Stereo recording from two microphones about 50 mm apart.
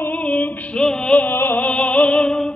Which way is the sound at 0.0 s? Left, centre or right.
Left.